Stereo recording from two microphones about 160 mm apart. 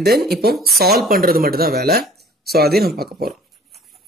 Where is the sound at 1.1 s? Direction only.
65° right (ahead or behind).